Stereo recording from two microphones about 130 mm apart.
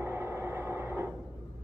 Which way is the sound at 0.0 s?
20° right (ahead or behind).